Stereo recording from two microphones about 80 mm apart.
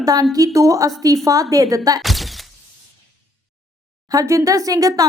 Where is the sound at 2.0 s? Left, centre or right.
Centre.